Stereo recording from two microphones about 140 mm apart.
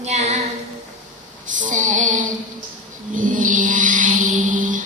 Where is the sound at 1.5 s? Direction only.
65° right (ahead or behind).